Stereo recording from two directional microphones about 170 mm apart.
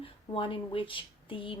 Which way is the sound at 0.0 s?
30° left (ahead or behind).